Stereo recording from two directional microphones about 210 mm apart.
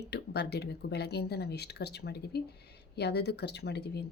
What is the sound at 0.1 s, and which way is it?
Speech, 50° left (ahead or behind).